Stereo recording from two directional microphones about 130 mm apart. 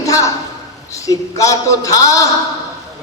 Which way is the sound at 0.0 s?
25° left (ahead or behind).